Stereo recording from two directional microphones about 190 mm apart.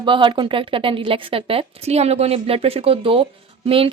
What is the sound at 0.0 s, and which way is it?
Speech, 25° right (ahead or behind).